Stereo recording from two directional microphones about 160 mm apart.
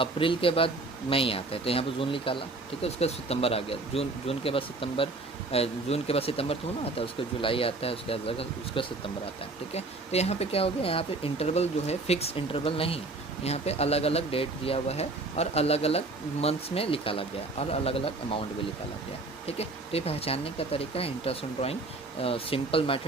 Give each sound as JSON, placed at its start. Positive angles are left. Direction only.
{"t": 0.0, "sound": "speech", "side_deg": 35}
{"t": 19.5, "sound": "speech", "side_deg": 40}